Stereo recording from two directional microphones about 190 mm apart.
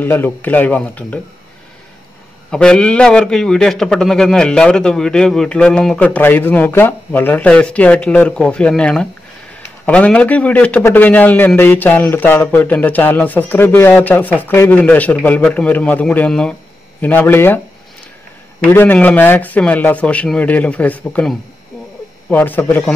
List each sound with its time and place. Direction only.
0.0 s a man's voice: 10° left (ahead or behind)
2.5 s a man's voice: 5° left (ahead or behind)
18.6 s a man's voice: 10° left (ahead or behind)